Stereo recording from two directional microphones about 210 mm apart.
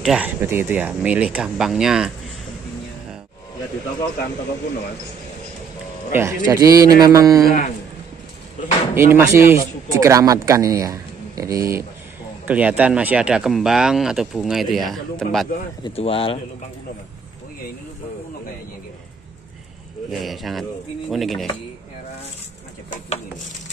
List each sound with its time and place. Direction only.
0.0 s speech: 5° right (ahead or behind)
6.1 s speech: 15° right (ahead or behind)
7.4 s speech: 40° left (ahead or behind)
8.9 s speech: 10° right (ahead or behind)
15.8 s speech: 25° left (ahead or behind)
20.1 s speech: centre (ahead or behind)